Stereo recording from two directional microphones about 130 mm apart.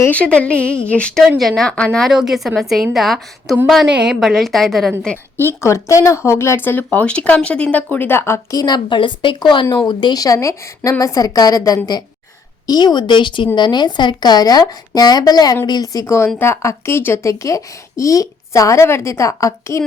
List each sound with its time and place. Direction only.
0.0 s a woman's voice: 10° left (ahead or behind)
5.5 s speech: 20° left (ahead or behind)